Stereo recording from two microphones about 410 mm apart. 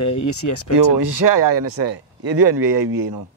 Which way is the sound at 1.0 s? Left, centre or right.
Right.